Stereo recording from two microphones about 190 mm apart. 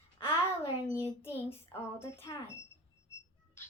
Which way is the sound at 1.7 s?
15° left (ahead or behind).